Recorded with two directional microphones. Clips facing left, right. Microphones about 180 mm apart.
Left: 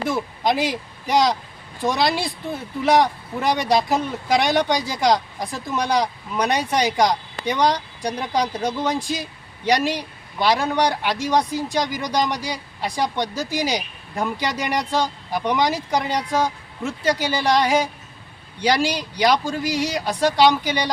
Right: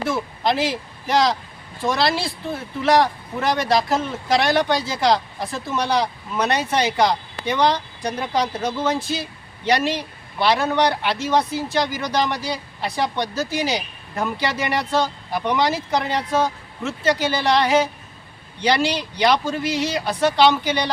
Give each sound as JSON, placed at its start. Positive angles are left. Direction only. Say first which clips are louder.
{"t": 0.1, "sound": "speech", "louder": "even", "side_deg": 15}